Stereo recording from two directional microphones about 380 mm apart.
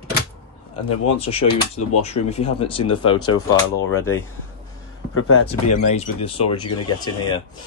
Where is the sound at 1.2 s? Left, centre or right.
Centre.